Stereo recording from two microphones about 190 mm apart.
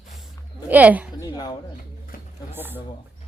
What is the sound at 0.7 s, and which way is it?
Speech, 10° right (ahead or behind).